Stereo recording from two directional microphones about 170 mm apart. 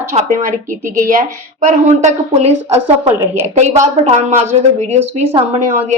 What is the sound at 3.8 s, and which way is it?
Speech, 45° right (ahead or behind).